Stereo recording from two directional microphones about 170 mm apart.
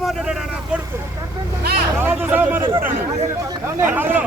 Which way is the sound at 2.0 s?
10° right (ahead or behind).